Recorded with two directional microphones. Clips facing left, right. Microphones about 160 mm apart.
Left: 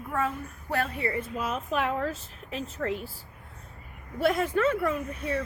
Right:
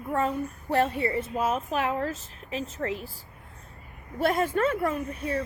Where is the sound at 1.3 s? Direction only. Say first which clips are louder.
Right 2 dB; 45° right (ahead or behind).